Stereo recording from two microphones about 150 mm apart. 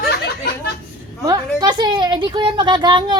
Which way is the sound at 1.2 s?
25° right (ahead or behind).